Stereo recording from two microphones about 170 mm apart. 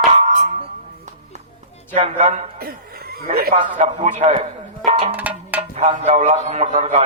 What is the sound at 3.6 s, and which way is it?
Speech, 40° right (ahead or behind).